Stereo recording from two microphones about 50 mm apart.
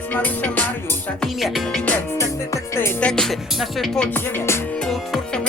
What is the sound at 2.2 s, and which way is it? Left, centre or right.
Music, left.